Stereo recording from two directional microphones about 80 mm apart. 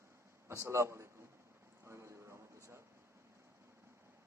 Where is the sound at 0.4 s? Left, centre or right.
Right.